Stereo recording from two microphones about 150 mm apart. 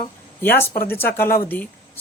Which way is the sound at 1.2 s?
80° left.